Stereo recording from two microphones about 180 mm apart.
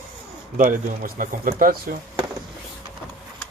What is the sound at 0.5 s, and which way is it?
Speech, 50° right (ahead or behind).